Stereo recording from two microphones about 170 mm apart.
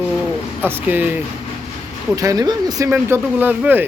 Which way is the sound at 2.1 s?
20° right (ahead or behind).